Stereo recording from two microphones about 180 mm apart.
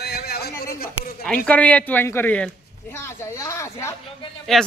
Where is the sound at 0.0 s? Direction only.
60° left (ahead or behind).